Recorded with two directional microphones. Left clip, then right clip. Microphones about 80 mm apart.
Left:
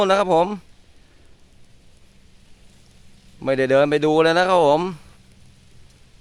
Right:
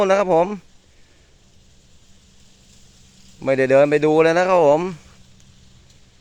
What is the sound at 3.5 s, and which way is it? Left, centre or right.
Speech, centre.